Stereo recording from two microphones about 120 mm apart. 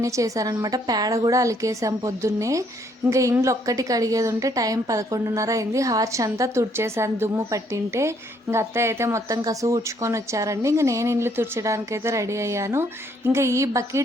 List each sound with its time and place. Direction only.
0.0 s a woman's voice: 25° right (ahead or behind)